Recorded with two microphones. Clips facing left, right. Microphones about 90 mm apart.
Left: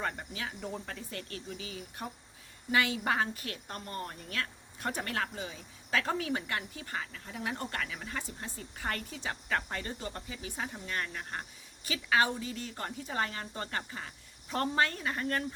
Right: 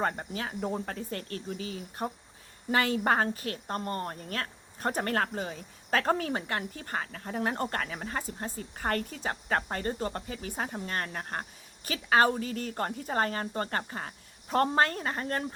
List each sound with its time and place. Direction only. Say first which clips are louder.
0.0 s a woman's voice: right 5 dB; 40° right (ahead or behind)